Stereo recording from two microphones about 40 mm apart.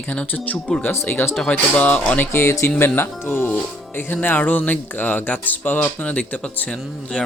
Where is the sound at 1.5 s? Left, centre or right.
Left.